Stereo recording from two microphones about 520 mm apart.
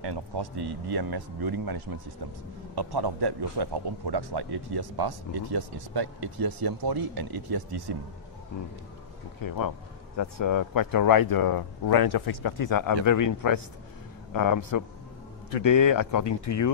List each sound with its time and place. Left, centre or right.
0.0 s a man's voice: right
9.4 s a man's voice: left